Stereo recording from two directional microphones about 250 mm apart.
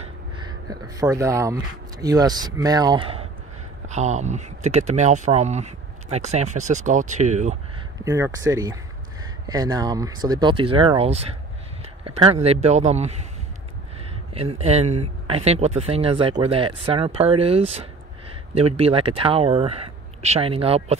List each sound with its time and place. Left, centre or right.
0.0 s speech: centre
8.0 s speech: centre
14.3 s speech: right